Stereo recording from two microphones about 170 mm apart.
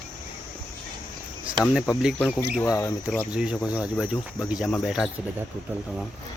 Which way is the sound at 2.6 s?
15° left (ahead or behind).